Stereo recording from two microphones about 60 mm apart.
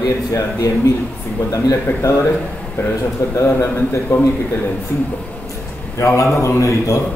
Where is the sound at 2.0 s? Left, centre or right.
Left.